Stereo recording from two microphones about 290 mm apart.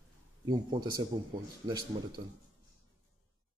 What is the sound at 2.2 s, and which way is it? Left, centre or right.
Speech, right.